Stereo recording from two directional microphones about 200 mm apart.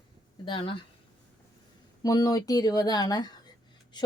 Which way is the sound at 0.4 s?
25° left (ahead or behind).